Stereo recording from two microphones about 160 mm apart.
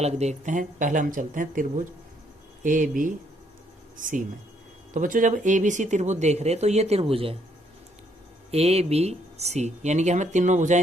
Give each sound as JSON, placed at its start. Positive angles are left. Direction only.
{"t": 0.0, "sound": "speech", "side_deg": -45}
{"t": 8.4, "sound": "speech", "side_deg": -40}